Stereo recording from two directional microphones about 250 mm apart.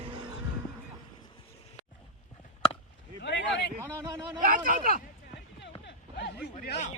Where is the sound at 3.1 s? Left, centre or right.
Left.